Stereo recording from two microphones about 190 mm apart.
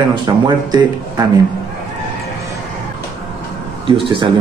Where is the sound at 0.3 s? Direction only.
20° right (ahead or behind).